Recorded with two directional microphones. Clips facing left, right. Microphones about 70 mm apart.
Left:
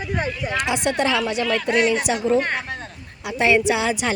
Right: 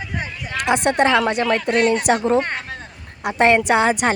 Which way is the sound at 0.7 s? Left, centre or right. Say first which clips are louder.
Right 7 dB; right.